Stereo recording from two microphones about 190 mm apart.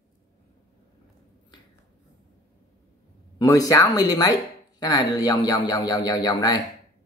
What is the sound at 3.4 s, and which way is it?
Speech, 15° left (ahead or behind).